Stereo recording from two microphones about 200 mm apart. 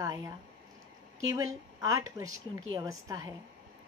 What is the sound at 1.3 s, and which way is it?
A woman's voice, 15° right (ahead or behind).